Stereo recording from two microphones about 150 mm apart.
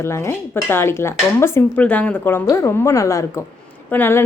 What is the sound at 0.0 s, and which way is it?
A woman's voice, 20° left (ahead or behind).